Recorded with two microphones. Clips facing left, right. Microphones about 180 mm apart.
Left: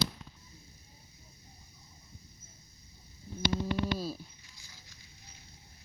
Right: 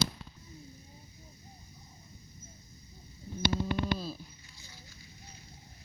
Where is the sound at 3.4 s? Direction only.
50° right (ahead or behind).